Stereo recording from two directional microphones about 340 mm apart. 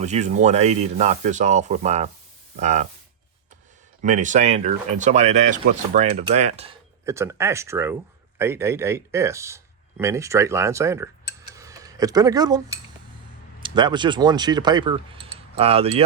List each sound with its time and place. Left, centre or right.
0.0 s speech: centre
4.0 s speech: right
7.0 s speech: centre